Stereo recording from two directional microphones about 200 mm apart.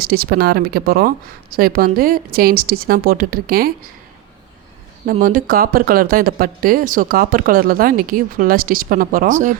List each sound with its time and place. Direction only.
0.0 s speech: 50° right (ahead or behind)
5.2 s speech: 45° right (ahead or behind)